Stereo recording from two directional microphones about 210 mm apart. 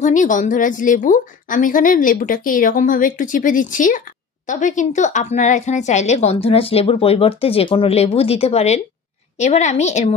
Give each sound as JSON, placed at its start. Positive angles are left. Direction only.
{"t": 0.0, "sound": "a woman's voice", "side_deg": 35}